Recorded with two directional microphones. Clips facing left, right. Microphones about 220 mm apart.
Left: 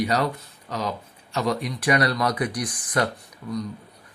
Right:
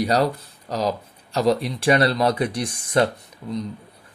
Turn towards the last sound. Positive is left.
turn(degrees=-20)  # may be behind; listen again after turning